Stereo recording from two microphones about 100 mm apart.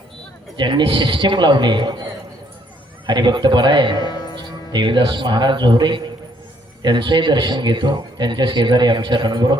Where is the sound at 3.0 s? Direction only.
50° right (ahead or behind).